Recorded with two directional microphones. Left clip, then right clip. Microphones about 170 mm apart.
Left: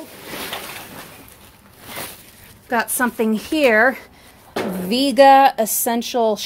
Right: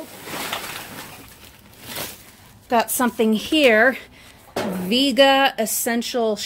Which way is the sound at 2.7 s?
10° right (ahead or behind).